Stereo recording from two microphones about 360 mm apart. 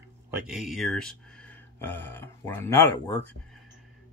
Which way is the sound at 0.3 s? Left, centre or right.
Centre.